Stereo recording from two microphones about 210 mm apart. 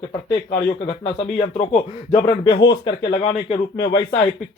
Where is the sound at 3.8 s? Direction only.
55° left (ahead or behind).